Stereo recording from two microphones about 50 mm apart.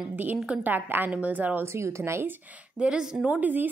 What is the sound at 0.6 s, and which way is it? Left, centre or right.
A woman's voice, right.